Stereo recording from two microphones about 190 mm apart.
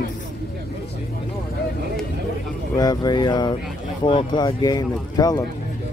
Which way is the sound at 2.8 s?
20° left (ahead or behind).